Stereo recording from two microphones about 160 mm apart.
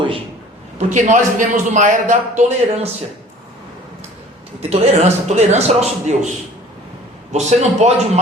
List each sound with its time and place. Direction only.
0.8 s a man's voice: 50° right (ahead or behind)
4.7 s a man's voice: 40° right (ahead or behind)
7.3 s a man's voice: 45° right (ahead or behind)